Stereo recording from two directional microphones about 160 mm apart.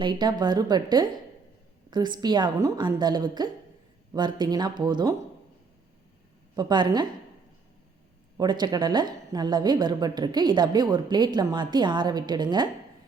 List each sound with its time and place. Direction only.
0.0 s a woman's voice: 30° right (ahead or behind)
6.6 s a woman's voice: 25° right (ahead or behind)
8.4 s a woman's voice: 25° right (ahead or behind)